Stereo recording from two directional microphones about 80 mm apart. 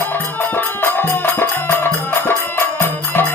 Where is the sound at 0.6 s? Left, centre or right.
Left.